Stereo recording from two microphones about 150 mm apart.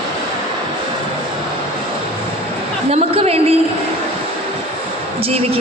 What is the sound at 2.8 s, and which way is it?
Speech, 45° right (ahead or behind).